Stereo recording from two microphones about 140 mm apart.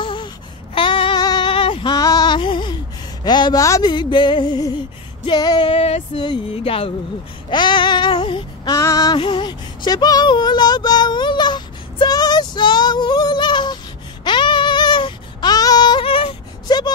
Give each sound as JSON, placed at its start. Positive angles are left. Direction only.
{"t": 0.0, "sound": "babbling", "side_deg": 35}
{"t": 0.7, "sound": "child singing", "side_deg": 40}
{"t": 2.0, "sound": "music", "side_deg": 25}
{"t": 3.3, "sound": "speech", "side_deg": 30}
{"t": 5.7, "sound": "a sound", "side_deg": 45}
{"t": 6.2, "sound": "speech", "side_deg": 40}
{"t": 7.4, "sound": "female singing", "side_deg": 35}
{"t": 14.2, "sound": "a sound", "side_deg": 35}